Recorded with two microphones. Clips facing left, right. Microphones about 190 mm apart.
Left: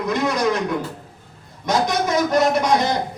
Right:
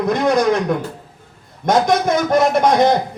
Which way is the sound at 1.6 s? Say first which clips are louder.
Right 5 dB; 50° right (ahead or behind).